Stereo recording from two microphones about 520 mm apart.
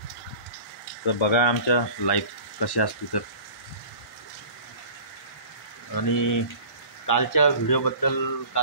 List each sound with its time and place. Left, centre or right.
1.0 s speech: left
5.9 s speech: left